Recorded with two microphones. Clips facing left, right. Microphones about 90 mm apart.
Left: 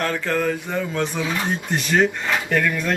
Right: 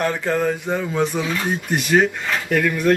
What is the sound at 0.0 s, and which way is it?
Mantra, 15° right (ahead or behind).